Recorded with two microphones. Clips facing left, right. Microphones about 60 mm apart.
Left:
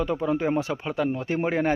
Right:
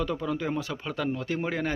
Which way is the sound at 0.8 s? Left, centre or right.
Centre.